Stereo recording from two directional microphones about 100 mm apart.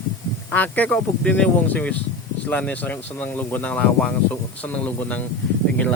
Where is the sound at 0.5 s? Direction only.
15° left (ahead or behind).